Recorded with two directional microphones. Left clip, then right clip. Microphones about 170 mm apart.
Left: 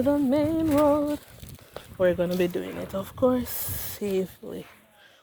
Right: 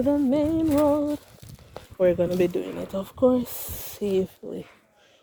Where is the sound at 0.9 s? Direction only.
10° right (ahead or behind).